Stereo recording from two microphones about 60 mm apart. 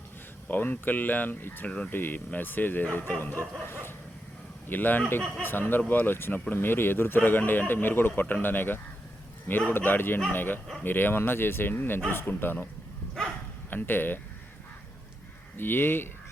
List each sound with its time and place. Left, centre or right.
0.4 s speech: left
1.6 s speech: centre
1.9 s speech: left
13.2 s bow-wow: centre
13.7 s speech: left
15.5 s speech: left